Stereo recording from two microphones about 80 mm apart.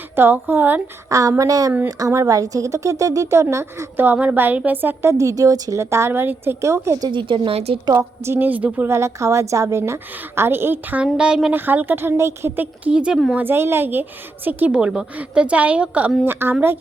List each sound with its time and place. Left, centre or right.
0.2 s a woman's voice: right
1.1 s a woman's voice: right
3.9 s a woman's voice: right
5.1 s a woman's voice: right
7.1 s a woman's voice: right
7.9 s a woman's voice: right
8.4 s a woman's voice: centre
8.9 s a woman's voice: right
11.0 s a woman's voice: centre
11.5 s a woman's voice: right
13.3 s a woman's voice: right
14.7 s a woman's voice: centre
16.2 s a woman's voice: right